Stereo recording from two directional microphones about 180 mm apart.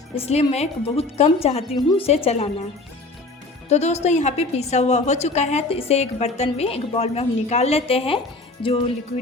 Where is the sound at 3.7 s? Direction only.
35° left (ahead or behind).